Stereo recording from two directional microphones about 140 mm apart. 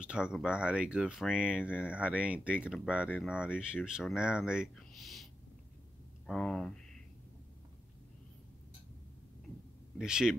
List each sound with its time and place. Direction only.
0.0 s speech: 5° right (ahead or behind)
9.9 s speech: 5° right (ahead or behind)